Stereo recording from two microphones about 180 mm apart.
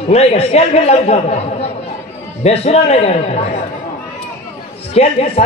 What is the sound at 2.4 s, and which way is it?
Speech, 35° left (ahead or behind).